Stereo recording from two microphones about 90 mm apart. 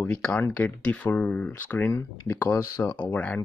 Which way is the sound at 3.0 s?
15° left (ahead or behind).